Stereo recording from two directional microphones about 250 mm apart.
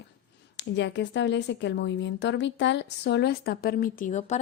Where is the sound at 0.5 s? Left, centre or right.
Left.